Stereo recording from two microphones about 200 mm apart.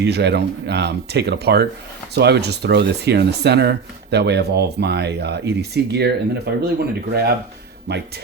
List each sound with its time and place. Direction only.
0.0 s speech: 55° right (ahead or behind)